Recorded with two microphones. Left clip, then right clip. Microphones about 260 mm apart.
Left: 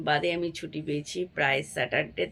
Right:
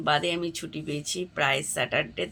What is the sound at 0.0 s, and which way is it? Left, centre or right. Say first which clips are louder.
Speech: right 1 dB; centre.